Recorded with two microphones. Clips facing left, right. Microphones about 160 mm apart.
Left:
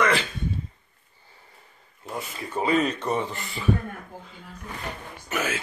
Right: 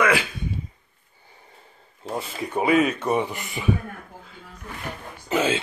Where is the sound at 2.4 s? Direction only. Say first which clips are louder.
Right 3 dB; 15° right (ahead or behind).